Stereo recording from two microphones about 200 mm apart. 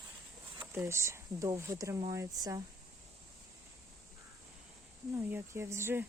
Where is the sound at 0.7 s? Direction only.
15° right (ahead or behind).